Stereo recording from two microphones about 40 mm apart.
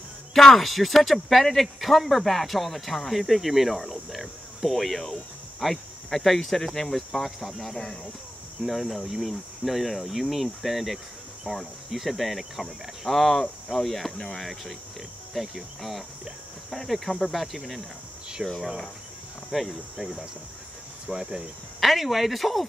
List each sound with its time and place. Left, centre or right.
0.3 s speech: centre
7.8 s speech: centre
8.6 s speech: centre
18.4 s speech: right
19.5 s speech: centre
21.1 s speech: right
21.7 s speech: centre